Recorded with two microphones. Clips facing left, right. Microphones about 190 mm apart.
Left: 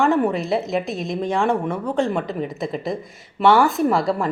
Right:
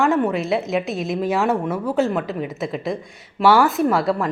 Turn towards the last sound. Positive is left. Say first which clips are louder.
# even
turn(degrees=0)  # may be behind; listen again after turning